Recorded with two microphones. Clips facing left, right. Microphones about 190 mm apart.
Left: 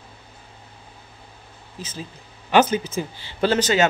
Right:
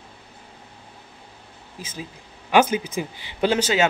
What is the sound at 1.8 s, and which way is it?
A man's voice, 10° right (ahead or behind).